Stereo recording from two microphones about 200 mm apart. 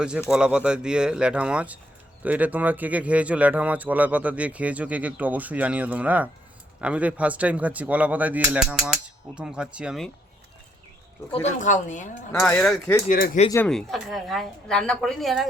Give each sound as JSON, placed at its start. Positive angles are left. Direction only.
{"t": 0.3, "sound": "a woman's voice", "side_deg": -5}
{"t": 11.6, "sound": "speech", "side_deg": 40}
{"t": 12.3, "sound": "speech", "side_deg": 10}
{"t": 13.1, "sound": "speech", "side_deg": 45}
{"t": 13.7, "sound": "a woman's voice", "side_deg": 0}